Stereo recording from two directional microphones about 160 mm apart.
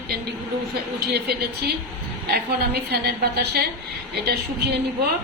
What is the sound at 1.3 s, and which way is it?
A woman's voice, 90° right.